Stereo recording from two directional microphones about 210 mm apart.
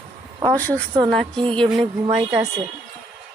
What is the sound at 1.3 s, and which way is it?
Music, 25° right (ahead or behind).